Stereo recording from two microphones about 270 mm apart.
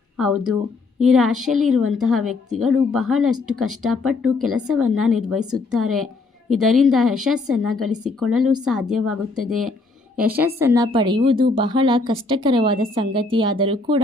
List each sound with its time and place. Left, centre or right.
1.0 s a woman's voice: centre